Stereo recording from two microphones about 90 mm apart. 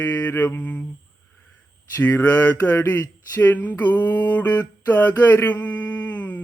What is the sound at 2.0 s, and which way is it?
Speech, 20° left (ahead or behind).